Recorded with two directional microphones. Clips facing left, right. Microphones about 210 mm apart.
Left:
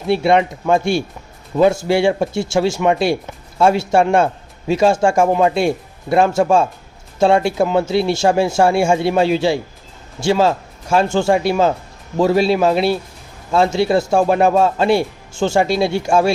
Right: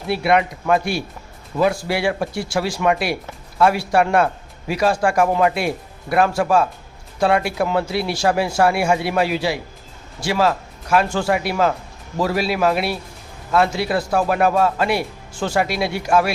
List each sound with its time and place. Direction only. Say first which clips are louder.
0.1 s speech: left 4 dB; 25° left (ahead or behind)